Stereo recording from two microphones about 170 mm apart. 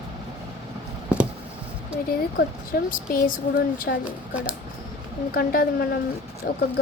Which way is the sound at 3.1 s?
55° left (ahead or behind).